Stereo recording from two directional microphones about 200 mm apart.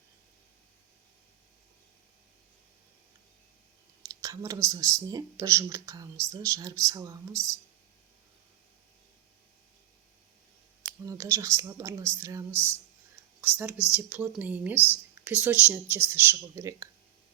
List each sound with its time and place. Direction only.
4.0 s speech: 15° right (ahead or behind)
11.0 s speech: 15° right (ahead or behind)